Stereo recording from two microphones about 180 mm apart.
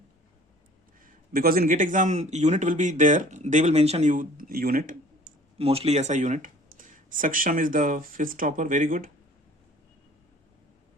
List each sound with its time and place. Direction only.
1.0 s speech: 55° right (ahead or behind)
5.5 s speech: 35° right (ahead or behind); by 9.0 s 50° right (ahead or behind)